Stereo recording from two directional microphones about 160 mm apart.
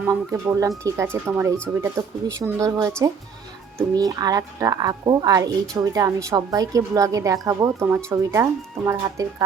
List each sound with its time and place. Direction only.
0.0 s speech: 15° right (ahead or behind)